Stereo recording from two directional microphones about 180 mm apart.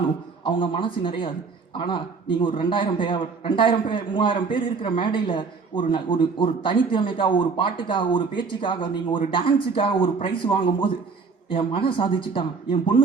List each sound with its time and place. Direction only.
0.4 s a man's voice: 30° left (ahead or behind)